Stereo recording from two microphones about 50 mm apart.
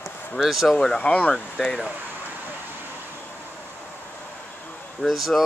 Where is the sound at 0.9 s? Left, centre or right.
Left.